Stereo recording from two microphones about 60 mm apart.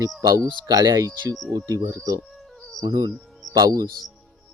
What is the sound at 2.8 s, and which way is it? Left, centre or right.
Speech, right.